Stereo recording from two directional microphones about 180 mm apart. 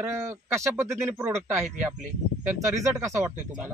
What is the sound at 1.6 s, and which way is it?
Speech, 45° right (ahead or behind).